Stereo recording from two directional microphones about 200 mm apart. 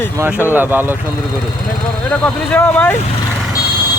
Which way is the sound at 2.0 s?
5° left (ahead or behind).